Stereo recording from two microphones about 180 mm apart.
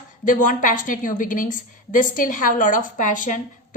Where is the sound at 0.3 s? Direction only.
45° left (ahead or behind).